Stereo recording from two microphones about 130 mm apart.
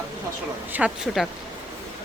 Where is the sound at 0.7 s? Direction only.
15° right (ahead or behind).